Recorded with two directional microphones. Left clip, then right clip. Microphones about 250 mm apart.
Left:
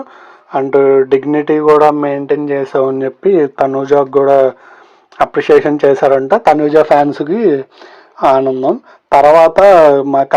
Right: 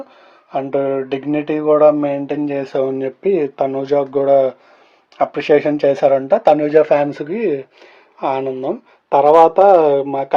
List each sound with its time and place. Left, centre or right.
0.5 s speech: left